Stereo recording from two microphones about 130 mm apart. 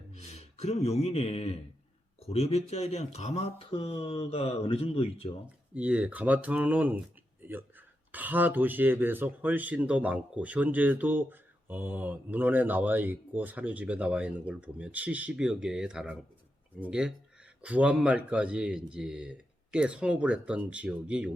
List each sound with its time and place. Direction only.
0.1 s speech: 55° left (ahead or behind)
3.7 s speech: 45° left (ahead or behind)
5.7 s speech: 10° right (ahead or behind)
8.1 s speech: 15° right (ahead or behind)